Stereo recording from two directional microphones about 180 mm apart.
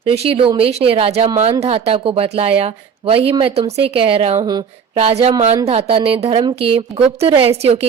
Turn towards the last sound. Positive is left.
turn(degrees=-35)  # may be behind; listen again after turning